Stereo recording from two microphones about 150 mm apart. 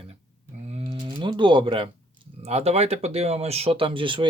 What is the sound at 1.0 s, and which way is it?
Speech, 30° right (ahead or behind).